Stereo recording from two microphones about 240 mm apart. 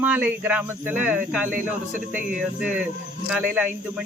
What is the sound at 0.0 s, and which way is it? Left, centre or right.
Speech, centre.